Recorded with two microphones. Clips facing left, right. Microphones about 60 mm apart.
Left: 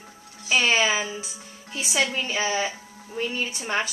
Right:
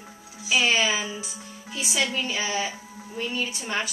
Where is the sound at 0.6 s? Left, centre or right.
Left.